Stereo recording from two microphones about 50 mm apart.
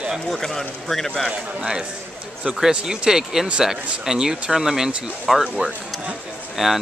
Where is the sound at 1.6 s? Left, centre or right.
Centre.